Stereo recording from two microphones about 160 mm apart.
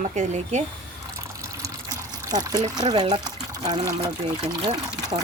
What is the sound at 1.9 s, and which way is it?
Speech, 25° right (ahead or behind).